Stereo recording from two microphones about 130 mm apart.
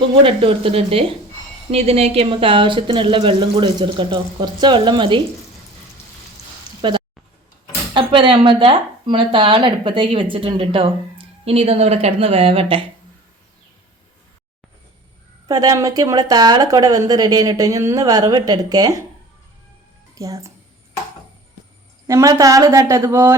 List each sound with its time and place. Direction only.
0.2 s a woman's voice: 45° right (ahead or behind)
7.9 s a woman's voice: 40° right (ahead or behind)
15.4 s speech: 30° right (ahead or behind)
20.1 s speech: 25° right (ahead or behind)
22.0 s speech: 25° right (ahead or behind)